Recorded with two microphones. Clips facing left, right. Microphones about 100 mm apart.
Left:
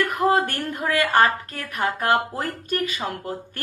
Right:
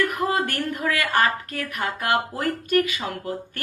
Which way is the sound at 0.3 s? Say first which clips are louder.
Left 3 dB; 35° left (ahead or behind).